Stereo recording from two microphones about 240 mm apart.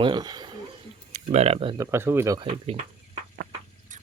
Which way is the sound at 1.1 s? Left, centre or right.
Right.